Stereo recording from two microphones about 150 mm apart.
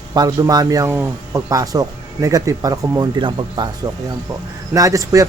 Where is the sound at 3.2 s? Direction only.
30° right (ahead or behind).